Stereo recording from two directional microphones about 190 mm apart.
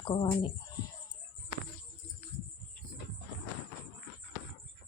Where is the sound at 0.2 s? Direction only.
25° left (ahead or behind).